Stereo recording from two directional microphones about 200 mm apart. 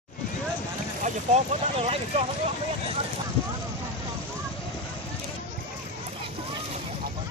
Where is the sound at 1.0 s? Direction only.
35° right (ahead or behind).